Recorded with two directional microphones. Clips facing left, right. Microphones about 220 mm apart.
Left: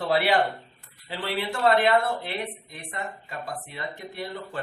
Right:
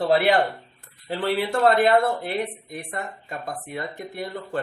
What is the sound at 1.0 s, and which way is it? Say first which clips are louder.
Speech: right 6 dB; 45° right (ahead or behind).